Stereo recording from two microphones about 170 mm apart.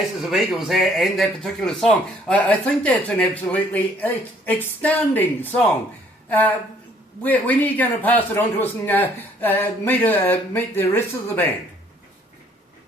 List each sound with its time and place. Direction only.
0.2 s speech: centre (ahead or behind)
7.2 s speech: 10° left (ahead or behind)